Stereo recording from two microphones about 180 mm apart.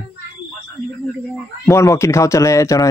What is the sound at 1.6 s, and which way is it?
Speech, 15° left (ahead or behind).